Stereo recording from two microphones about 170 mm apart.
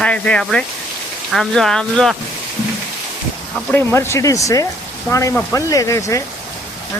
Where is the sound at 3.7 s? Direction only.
15° left (ahead or behind).